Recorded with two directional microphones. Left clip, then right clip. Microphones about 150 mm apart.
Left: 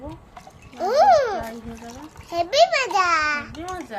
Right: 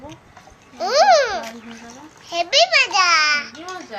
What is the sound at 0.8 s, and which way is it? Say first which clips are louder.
Babbling: right 2 dB; 30° left (ahead or behind).